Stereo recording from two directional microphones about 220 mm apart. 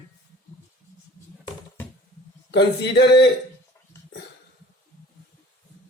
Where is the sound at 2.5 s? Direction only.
50° left (ahead or behind).